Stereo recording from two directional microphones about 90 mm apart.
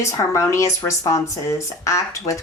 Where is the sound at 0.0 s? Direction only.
35° left (ahead or behind).